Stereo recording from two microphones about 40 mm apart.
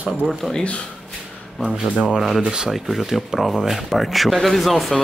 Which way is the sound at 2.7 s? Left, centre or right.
Centre.